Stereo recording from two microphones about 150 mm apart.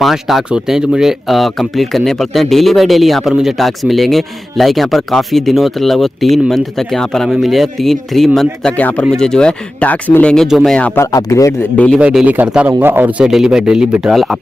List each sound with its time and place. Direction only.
0.0 s speech: centre (ahead or behind)
11.0 s speech: 20° left (ahead or behind)
11.7 s a man's voice: 10° left (ahead or behind)
12.0 s speech: 5° right (ahead or behind)